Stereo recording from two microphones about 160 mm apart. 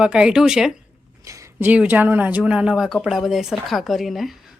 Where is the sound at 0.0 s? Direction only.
5° right (ahead or behind).